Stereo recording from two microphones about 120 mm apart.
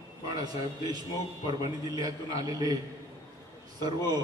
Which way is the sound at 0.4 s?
35° right (ahead or behind).